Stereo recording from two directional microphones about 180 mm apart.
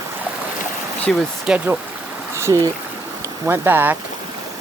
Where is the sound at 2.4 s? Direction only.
15° right (ahead or behind).